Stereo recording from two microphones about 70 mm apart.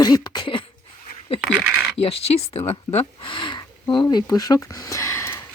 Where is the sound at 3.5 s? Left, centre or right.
Left.